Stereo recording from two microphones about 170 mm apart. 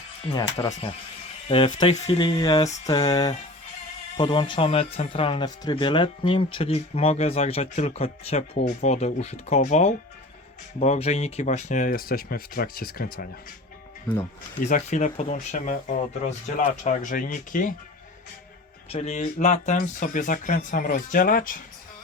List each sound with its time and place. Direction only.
0.6 s speech: 20° left (ahead or behind); by 13.2 s 60° left (ahead or behind)
14.7 s speech: 45° left (ahead or behind)
18.9 s speech: 40° left (ahead or behind)